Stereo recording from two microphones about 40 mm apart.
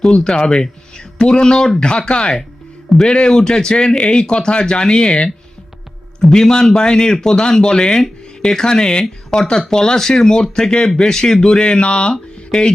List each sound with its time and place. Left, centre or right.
0.0 s speech: centre
6.3 s speech: centre